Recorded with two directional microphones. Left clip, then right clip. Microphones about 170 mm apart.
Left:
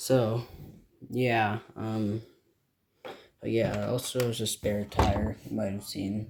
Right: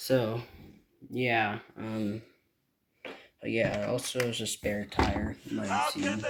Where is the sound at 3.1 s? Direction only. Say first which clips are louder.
Left 1 dB; 15° left (ahead or behind).